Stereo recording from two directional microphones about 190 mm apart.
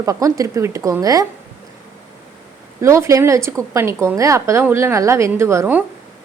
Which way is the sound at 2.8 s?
15° right (ahead or behind).